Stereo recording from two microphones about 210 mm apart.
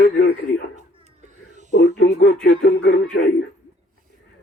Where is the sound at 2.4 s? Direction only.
60° left (ahead or behind).